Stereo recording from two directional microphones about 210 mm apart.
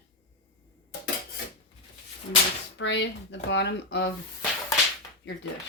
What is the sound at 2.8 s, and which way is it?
A woman's voice, 55° left (ahead or behind).